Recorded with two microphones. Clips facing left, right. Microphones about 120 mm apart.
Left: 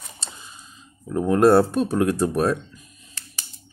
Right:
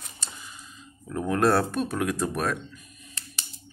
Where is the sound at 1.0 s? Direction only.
25° left (ahead or behind).